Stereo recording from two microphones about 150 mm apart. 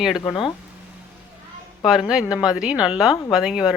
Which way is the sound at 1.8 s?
Centre (ahead or behind).